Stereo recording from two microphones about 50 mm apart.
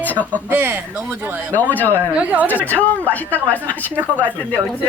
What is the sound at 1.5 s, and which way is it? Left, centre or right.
Speech, left.